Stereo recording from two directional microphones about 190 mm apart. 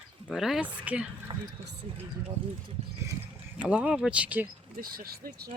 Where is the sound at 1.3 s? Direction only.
25° right (ahead or behind).